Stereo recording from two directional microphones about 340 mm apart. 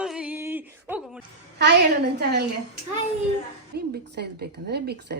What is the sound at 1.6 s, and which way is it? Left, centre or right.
Speech, right.